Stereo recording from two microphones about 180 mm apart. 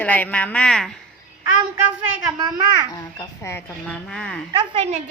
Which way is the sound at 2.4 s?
25° right (ahead or behind).